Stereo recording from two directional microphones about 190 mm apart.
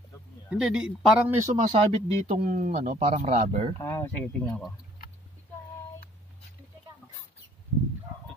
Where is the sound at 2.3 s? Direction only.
50° right (ahead or behind).